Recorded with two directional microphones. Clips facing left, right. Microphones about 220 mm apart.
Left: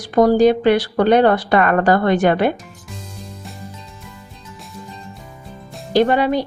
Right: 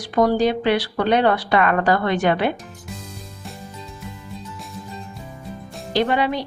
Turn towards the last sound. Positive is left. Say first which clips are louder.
# left 5 dB
turn(degrees=45)  # may be behind; listen again after turning